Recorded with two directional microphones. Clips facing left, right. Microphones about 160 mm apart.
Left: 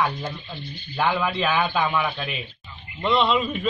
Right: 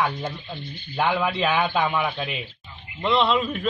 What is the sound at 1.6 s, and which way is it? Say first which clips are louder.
A man's voice: even; centre (ahead or behind).